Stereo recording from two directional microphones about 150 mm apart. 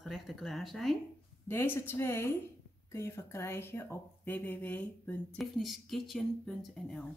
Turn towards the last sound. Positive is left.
turn(degrees=0)  # may be behind; listen again after turning